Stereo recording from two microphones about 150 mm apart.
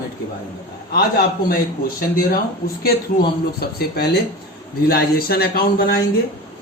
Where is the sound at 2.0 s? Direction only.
70° left (ahead or behind).